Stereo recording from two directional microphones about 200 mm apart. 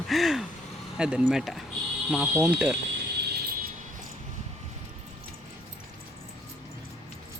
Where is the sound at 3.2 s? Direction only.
55° right (ahead or behind).